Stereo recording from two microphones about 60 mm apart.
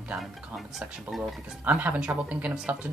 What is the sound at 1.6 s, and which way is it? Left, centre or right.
Speech, right.